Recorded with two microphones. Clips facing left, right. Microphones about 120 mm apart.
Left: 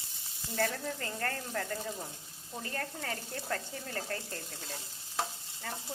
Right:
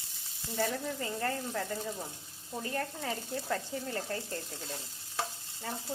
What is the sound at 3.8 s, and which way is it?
Speech, 25° right (ahead or behind).